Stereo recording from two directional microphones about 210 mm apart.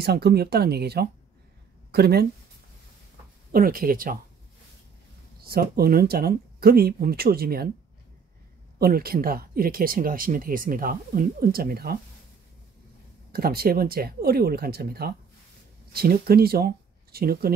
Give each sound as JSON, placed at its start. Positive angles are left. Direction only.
{"t": 0.0, "sound": "speech", "side_deg": -50}
{"t": 3.5, "sound": "speech", "side_deg": -45}
{"t": 5.4, "sound": "speech", "side_deg": -45}
{"t": 8.7, "sound": "speech", "side_deg": -45}
{"t": 13.3, "sound": "speech", "side_deg": -45}